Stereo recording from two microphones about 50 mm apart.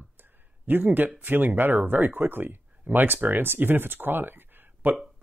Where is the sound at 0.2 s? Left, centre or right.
Right.